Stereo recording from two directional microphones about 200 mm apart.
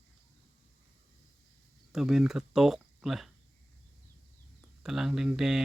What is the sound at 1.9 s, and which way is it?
Speech, centre (ahead or behind).